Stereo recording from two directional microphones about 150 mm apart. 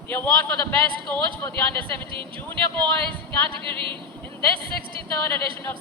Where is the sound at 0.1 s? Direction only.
15° left (ahead or behind).